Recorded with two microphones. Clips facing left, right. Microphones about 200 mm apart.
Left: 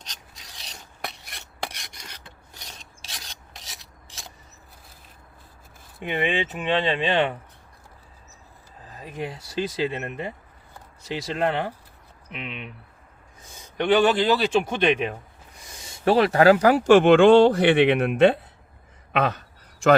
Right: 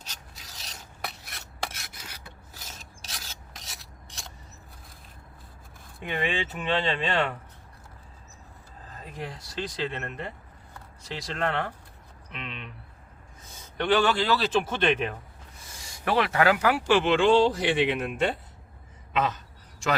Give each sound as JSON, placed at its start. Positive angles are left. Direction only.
{"t": 0.0, "sound": "filing", "side_deg": -5}
{"t": 6.0, "sound": "speech", "side_deg": 20}
{"t": 9.2, "sound": "speech", "side_deg": 5}
{"t": 11.0, "sound": "speech", "side_deg": 5}
{"t": 13.7, "sound": "speech", "side_deg": 15}
{"t": 15.8, "sound": "speech", "side_deg": 30}
{"t": 19.1, "sound": "a sound", "side_deg": 60}